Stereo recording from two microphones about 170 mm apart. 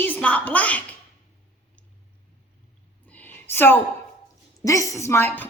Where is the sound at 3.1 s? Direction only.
10° left (ahead or behind).